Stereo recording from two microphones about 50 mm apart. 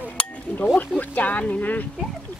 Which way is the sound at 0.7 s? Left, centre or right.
Left.